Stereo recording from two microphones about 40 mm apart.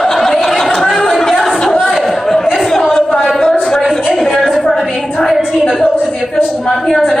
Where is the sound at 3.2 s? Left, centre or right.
Centre.